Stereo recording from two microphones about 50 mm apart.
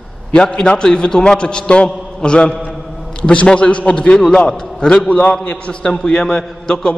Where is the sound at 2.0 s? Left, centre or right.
Centre.